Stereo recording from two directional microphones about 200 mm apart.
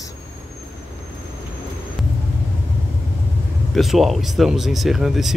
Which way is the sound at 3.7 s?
Centre (ahead or behind).